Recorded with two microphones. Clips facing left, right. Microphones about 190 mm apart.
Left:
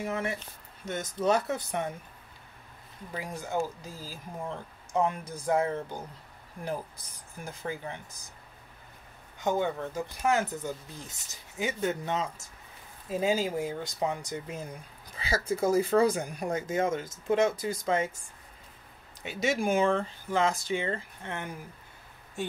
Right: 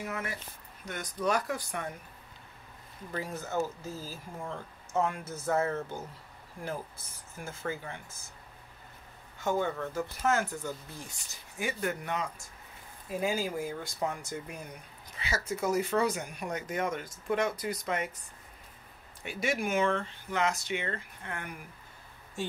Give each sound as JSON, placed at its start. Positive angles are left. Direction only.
{"t": 0.0, "sound": "speech", "side_deg": 25}
{"t": 3.1, "sound": "speech", "side_deg": 15}
{"t": 9.4, "sound": "speech", "side_deg": 15}
{"t": 15.1, "sound": "speech", "side_deg": 35}
{"t": 19.2, "sound": "speech", "side_deg": 25}